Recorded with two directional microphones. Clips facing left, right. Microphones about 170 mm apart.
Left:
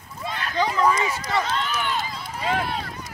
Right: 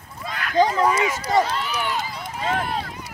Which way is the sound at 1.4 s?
10° right (ahead or behind).